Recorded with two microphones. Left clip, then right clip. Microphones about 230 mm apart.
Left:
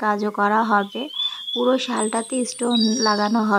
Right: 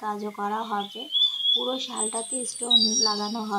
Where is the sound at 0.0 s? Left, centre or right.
Left.